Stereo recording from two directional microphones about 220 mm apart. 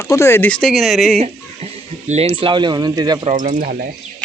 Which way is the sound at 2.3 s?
20° right (ahead or behind).